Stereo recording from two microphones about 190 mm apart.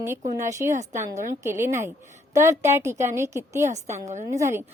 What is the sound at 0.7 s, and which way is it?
Speech, 40° right (ahead or behind).